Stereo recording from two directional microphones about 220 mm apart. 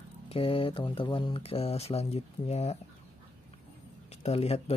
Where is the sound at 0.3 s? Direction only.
25° left (ahead or behind).